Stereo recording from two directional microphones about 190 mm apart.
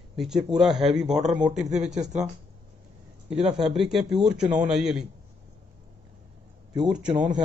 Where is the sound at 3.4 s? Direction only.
30° right (ahead or behind).